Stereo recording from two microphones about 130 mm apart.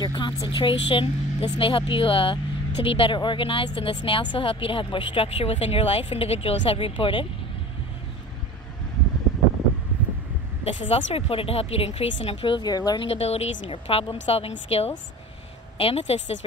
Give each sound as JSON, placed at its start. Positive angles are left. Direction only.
{"t": 0.0, "sound": "speech", "side_deg": 35}
{"t": 10.6, "sound": "speech", "side_deg": 50}
{"t": 13.1, "sound": "speech", "side_deg": 50}